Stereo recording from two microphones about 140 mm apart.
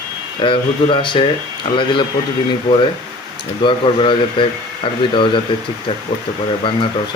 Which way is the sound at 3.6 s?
35° left (ahead or behind).